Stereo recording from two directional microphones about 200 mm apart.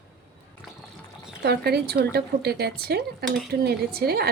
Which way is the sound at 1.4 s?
55° right (ahead or behind).